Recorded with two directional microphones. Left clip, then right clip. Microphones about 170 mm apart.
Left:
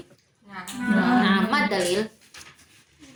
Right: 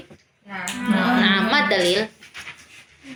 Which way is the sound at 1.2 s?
15° right (ahead or behind).